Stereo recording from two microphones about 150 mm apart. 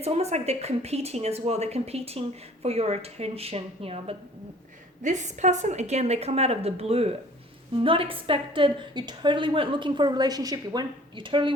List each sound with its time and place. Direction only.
0.0 s speech: 45° right (ahead or behind)
5.0 s a woman's voice: 50° right (ahead or behind); by 11.5 s 35° right (ahead or behind)